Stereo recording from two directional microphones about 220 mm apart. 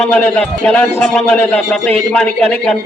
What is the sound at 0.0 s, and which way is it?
A man's voice, 5° left (ahead or behind).